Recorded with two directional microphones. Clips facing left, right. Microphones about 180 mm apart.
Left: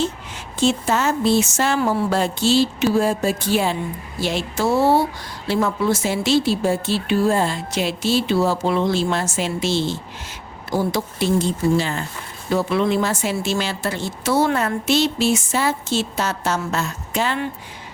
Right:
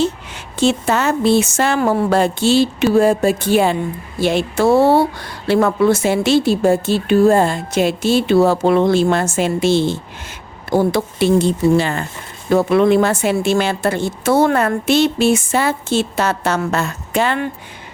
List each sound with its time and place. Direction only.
0.0 s speech: 65° right (ahead or behind)